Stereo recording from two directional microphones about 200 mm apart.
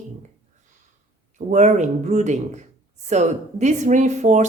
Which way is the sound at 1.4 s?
40° right (ahead or behind).